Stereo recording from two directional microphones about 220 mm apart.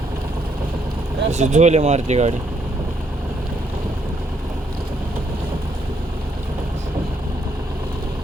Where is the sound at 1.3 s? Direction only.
30° right (ahead or behind).